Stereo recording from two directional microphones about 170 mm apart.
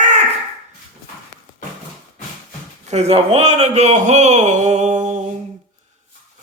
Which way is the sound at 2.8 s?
40° right (ahead or behind).